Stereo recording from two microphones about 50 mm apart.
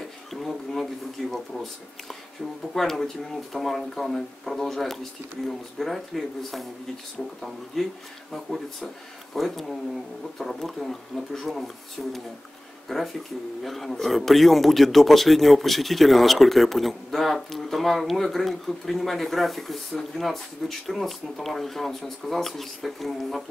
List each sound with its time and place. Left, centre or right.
0.3 s speech: centre
2.7 s speech: centre
7.8 s speech: centre